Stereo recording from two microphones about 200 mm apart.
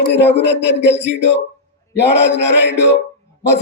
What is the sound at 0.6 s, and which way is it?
A man's voice, 60° left (ahead or behind).